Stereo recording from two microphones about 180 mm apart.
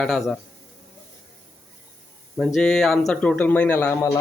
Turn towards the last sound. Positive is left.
turn(degrees=15)  # may be behind; listen again after turning